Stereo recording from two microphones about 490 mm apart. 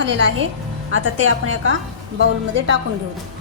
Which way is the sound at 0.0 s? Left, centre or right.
Right.